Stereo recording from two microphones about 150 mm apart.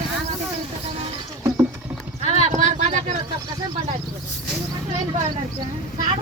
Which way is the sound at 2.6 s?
55° right (ahead or behind).